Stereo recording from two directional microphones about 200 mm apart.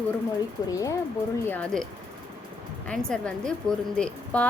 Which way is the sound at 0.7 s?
15° left (ahead or behind).